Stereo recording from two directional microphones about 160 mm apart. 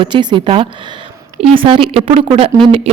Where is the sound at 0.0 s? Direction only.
30° right (ahead or behind).